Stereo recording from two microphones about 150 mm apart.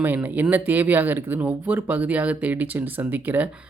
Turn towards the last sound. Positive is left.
turn(degrees=-10)  # may be behind; listen again after turning